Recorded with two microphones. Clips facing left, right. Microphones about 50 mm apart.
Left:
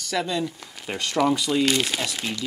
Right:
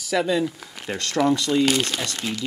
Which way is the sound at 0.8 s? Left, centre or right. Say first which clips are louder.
Right 1 dB; centre.